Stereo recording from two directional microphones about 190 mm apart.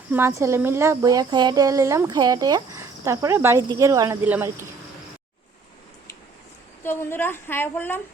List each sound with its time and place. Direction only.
0.1 s speech: 15° right (ahead or behind)
6.8 s a woman's voice: 10° left (ahead or behind)